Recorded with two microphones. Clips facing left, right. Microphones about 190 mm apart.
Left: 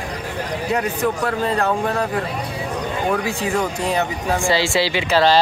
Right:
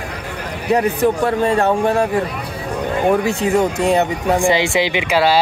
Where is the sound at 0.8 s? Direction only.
25° right (ahead or behind).